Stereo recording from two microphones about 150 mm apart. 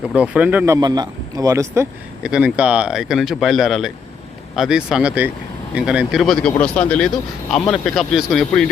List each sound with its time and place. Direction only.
0.1 s speech: 10° right (ahead or behind)
0.6 s speech: 20° right (ahead or behind)
2.2 s speech: 5° right (ahead or behind)